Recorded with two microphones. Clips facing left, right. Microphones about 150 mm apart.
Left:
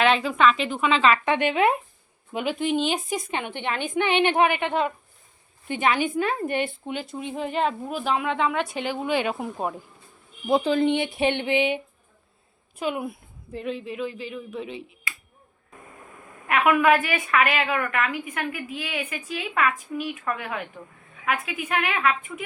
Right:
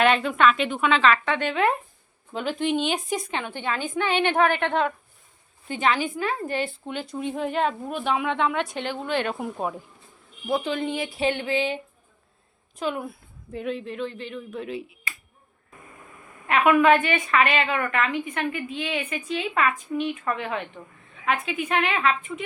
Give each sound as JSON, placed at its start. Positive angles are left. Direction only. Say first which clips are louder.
{"t": 0.0, "sound": "a woman's voice", "louder": "even", "side_deg": 0}
{"t": 1.1, "sound": "a woman's voice", "louder": "left 2 dB", "side_deg": 15}
{"t": 3.4, "sound": "a woman's voice", "louder": "even", "side_deg": 20}
{"t": 6.8, "sound": "a woman's voice", "louder": "right 1 dB", "side_deg": 5}
{"t": 10.6, "sound": "speech", "louder": "left 6 dB", "side_deg": 35}
{"t": 12.8, "sound": "a woman's voice", "louder": "left 1 dB", "side_deg": 10}
{"t": 16.5, "sound": "a woman's voice", "louder": "right 1 dB", "side_deg": 5}